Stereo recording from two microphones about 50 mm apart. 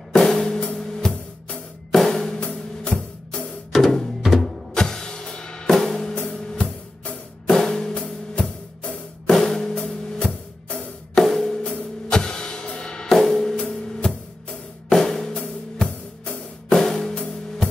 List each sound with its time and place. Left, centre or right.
0.1 s drum kit: centre
1.9 s music: centre
2.9 s music: centre
4.2 s music: centre
4.7 s music: centre
7.4 s music: centre
11.6 s music: centre
14.9 s drum kit: centre
16.6 s music: centre